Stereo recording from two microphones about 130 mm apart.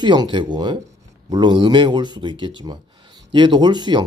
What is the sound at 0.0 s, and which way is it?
Speech, 35° right (ahead or behind).